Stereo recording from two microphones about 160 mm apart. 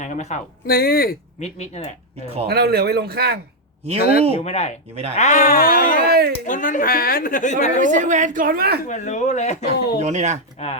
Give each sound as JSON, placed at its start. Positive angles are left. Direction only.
{"t": 0.0, "sound": "speech", "side_deg": 45}
{"t": 0.7, "sound": "speech", "side_deg": 70}
{"t": 1.4, "sound": "speech", "side_deg": 40}
{"t": 2.5, "sound": "a man's voice", "side_deg": -80}
{"t": 4.4, "sound": "speech", "side_deg": 40}
{"t": 6.1, "sound": "a sound", "side_deg": -80}
{"t": 6.4, "sound": "speech", "side_deg": 55}
{"t": 7.8, "sound": "a woman's voice", "side_deg": -50}
{"t": 8.9, "sound": "speech", "side_deg": 50}
{"t": 9.7, "sound": "speech", "side_deg": 90}
{"t": 10.0, "sound": "a woman's voice", "side_deg": -45}
{"t": 10.6, "sound": "speech", "side_deg": 40}